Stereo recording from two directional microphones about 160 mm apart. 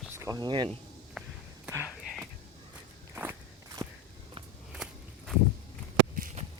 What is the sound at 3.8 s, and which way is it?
Walk, 35° right (ahead or behind).